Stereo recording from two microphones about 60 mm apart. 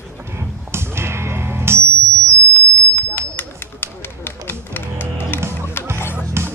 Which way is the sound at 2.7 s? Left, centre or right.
Left.